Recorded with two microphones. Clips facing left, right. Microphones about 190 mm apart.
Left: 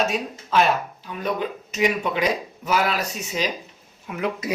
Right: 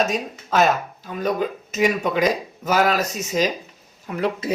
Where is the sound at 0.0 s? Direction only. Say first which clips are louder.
Right 1 dB; 45° right (ahead or behind).